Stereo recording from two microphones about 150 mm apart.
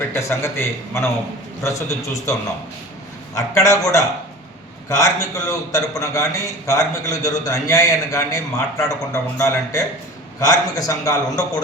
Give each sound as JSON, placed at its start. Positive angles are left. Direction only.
{"t": 0.1, "sound": "a man's voice", "side_deg": 15}
{"t": 3.3, "sound": "a man's voice", "side_deg": 20}